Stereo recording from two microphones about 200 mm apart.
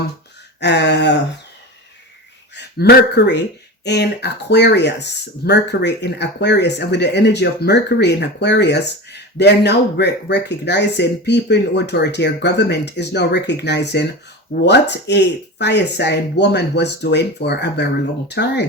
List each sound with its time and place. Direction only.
0.6 s speech: 60° left (ahead or behind)
2.6 s speech: 55° left (ahead or behind)